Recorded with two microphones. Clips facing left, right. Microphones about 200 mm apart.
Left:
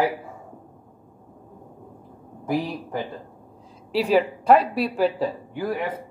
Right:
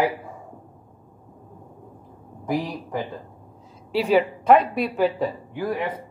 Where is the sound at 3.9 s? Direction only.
35° left (ahead or behind).